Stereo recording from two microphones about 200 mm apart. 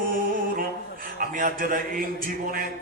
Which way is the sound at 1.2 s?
45° right (ahead or behind).